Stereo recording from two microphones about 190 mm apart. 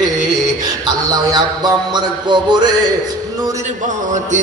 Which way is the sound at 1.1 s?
20° right (ahead or behind).